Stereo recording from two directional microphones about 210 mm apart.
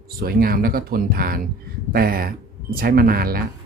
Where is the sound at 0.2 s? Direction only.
45° right (ahead or behind).